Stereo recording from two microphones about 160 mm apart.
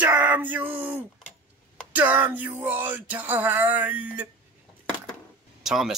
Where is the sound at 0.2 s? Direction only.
10° right (ahead or behind).